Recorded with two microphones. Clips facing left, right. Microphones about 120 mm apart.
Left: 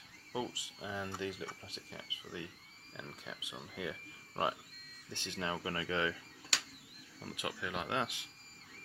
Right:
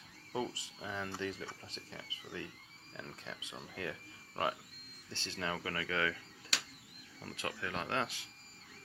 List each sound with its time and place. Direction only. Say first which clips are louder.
0.3 s speech: right 1 dB; 10° left (ahead or behind)
5.1 s speech: even; 15° left (ahead or behind)
7.2 s speech: even; 10° left (ahead or behind)